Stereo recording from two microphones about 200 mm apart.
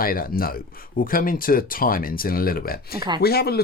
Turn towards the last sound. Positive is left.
turn(degrees=50)  # may be behind; listen again after turning